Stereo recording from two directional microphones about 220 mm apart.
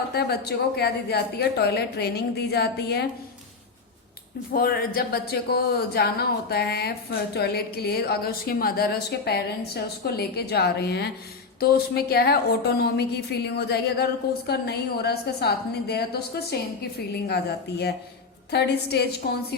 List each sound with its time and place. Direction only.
0.1 s speech: 45° left (ahead or behind)
4.9 s speech: 45° left (ahead or behind)